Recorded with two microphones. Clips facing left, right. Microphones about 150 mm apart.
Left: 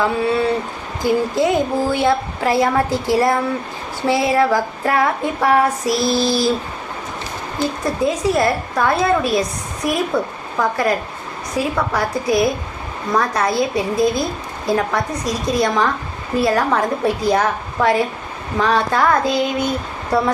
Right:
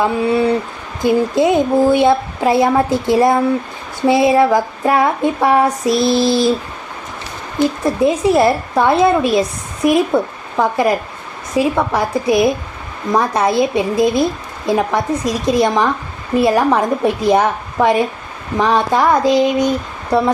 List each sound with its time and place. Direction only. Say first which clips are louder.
0.0 s female singing: right 3 dB; 20° right (ahead or behind)
7.9 s female singing: right 4 dB; 25° right (ahead or behind)